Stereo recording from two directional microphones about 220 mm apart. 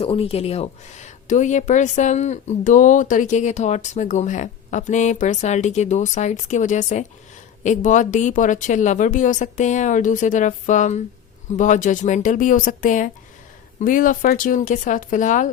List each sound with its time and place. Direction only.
0.0 s speech: 25° left (ahead or behind)